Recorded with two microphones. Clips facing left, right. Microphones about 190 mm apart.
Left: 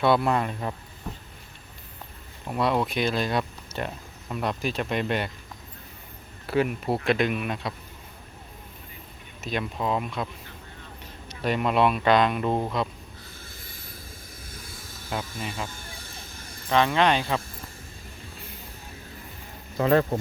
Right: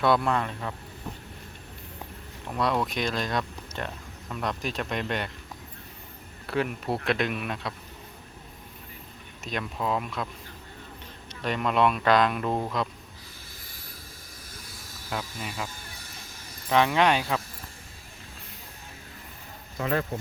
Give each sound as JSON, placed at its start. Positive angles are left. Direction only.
{"t": 0.0, "sound": "a man's voice", "side_deg": 5}
{"t": 1.1, "sound": "a sound", "side_deg": 0}
{"t": 2.5, "sound": "speech", "side_deg": 5}
{"t": 6.5, "sound": "speech", "side_deg": 5}
{"t": 9.4, "sound": "speech", "side_deg": 0}
{"t": 11.3, "sound": "speech", "side_deg": 5}
{"t": 15.1, "sound": "speech", "side_deg": 5}
{"t": 19.8, "sound": "speech", "side_deg": 35}